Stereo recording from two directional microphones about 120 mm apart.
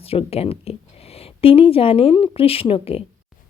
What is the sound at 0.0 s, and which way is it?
A woman's voice, 55° left (ahead or behind).